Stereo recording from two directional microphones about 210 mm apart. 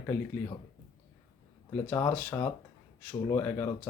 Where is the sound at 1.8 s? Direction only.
10° left (ahead or behind).